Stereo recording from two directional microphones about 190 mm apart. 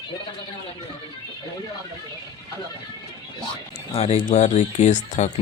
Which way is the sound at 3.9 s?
30° left (ahead or behind).